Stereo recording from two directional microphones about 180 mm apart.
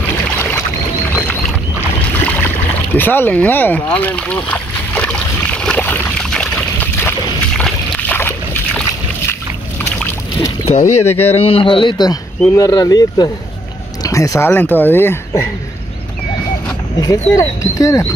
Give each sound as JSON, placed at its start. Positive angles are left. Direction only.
{"t": 2.1, "sound": "boat", "side_deg": 10}
{"t": 10.6, "sound": "speech", "side_deg": 35}
{"t": 16.9, "sound": "speech", "side_deg": 20}